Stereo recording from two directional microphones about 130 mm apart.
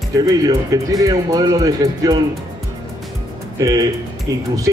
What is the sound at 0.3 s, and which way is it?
Speech, 30° right (ahead or behind).